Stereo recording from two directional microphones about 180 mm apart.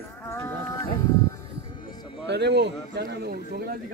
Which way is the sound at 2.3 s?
70° right (ahead or behind).